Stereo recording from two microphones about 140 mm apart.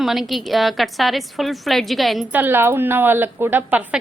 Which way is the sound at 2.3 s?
15° right (ahead or behind).